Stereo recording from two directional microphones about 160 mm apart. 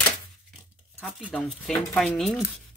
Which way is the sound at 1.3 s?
15° left (ahead or behind).